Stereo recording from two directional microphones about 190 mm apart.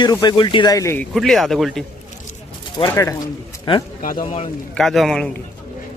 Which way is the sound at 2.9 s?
15° left (ahead or behind).